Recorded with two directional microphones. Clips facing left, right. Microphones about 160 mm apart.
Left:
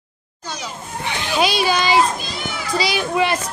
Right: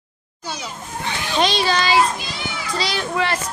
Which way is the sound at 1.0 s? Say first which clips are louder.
Left 1 dB; 10° left (ahead or behind).